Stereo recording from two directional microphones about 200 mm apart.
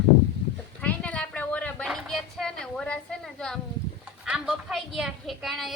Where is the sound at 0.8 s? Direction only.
5° left (ahead or behind).